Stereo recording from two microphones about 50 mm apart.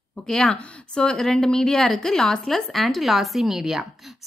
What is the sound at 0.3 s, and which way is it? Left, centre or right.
A woman's voice, centre.